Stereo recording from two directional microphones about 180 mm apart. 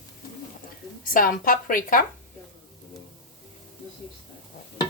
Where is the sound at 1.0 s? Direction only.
50° left (ahead or behind).